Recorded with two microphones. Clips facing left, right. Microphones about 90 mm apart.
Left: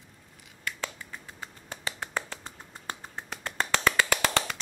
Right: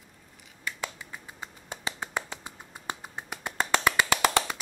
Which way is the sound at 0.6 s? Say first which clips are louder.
Even; 10° right (ahead or behind).